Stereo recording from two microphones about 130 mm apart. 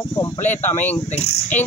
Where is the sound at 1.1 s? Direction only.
55° left (ahead or behind).